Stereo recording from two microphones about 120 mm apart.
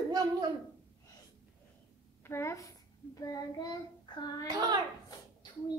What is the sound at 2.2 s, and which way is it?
Child singing, 25° left (ahead or behind).